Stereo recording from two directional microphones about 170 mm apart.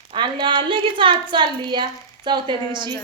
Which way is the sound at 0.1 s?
25° right (ahead or behind).